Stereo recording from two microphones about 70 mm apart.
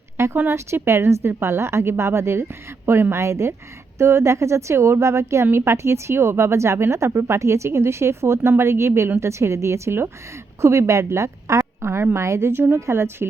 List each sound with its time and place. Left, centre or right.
0.2 s a woman's voice: right